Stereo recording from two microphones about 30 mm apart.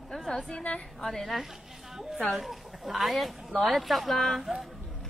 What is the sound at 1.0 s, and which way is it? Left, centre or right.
Speech, centre.